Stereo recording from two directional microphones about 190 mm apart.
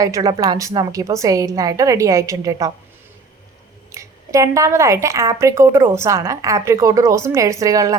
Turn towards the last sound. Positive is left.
turn(degrees=-20)  # may be behind; listen again after turning